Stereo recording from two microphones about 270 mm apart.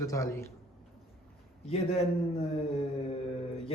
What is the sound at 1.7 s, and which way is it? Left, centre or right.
Speech, left.